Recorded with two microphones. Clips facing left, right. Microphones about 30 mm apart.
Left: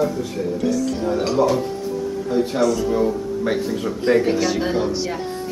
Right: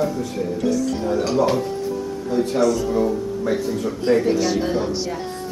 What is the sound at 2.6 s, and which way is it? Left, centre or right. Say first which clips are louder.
Speech: even; centre.